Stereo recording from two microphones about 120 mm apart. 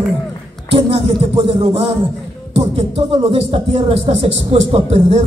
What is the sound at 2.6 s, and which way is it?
Speech, 50° right (ahead or behind).